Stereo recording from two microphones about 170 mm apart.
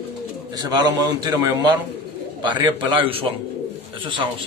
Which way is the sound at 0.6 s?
25° right (ahead or behind).